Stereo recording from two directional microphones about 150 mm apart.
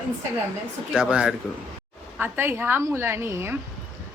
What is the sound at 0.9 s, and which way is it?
A woman's voice, 5° right (ahead or behind).